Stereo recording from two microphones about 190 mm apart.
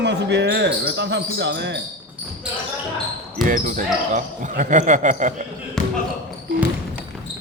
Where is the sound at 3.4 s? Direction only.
45° right (ahead or behind).